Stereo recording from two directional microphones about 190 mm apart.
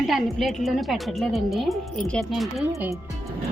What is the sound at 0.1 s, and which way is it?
A woman's voice, centre (ahead or behind).